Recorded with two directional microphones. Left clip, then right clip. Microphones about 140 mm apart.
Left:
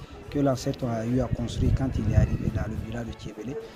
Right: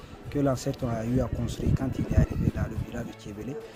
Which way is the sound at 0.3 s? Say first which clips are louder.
Left 2 dB; 10° right (ahead or behind).